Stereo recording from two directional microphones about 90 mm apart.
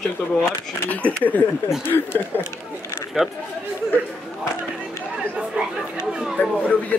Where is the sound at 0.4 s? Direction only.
15° left (ahead or behind).